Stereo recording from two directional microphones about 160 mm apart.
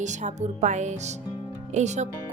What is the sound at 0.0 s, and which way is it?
Speech, 50° right (ahead or behind).